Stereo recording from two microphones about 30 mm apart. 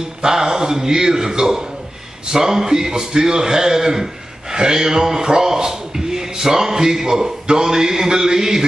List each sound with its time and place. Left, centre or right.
0.2 s a man's voice: centre